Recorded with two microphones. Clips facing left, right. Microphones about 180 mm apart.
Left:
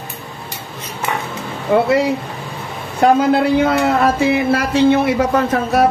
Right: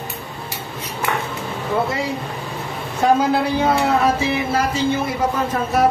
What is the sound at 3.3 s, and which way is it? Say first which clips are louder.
Speech: left 4 dB; 60° left (ahead or behind).